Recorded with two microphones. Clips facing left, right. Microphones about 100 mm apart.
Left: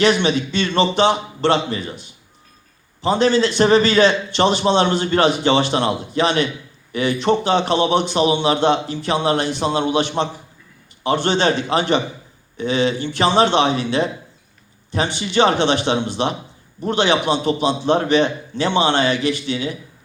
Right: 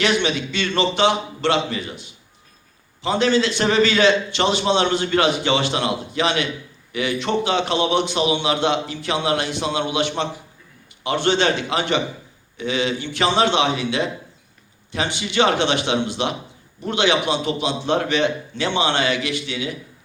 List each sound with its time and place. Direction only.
0.0 s a man's voice: 35° left (ahead or behind)